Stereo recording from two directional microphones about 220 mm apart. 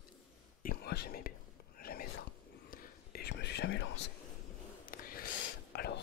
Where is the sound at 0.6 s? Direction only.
45° left (ahead or behind).